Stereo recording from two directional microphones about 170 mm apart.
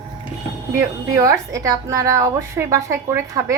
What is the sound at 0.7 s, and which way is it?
A woman's voice, 20° right (ahead or behind).